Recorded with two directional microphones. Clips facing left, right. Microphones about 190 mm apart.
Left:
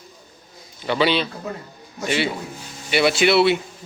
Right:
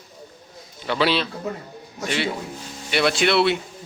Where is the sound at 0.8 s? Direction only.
Centre (ahead or behind).